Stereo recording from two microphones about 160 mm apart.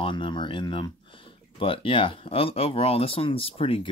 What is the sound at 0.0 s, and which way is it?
Speech, 30° left (ahead or behind).